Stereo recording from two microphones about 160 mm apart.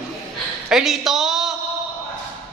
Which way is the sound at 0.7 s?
Centre (ahead or behind).